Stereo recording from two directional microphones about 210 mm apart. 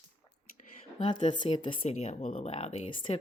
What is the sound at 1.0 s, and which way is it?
Speech, 25° left (ahead or behind).